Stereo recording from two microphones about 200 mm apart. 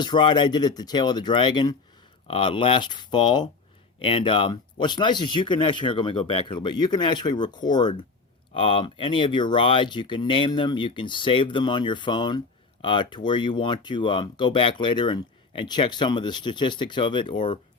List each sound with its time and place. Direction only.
0.0 s speech: 20° left (ahead or behind)